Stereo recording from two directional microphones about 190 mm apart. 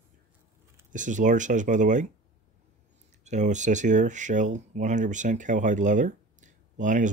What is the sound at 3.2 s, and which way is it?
Speech, 40° right (ahead or behind).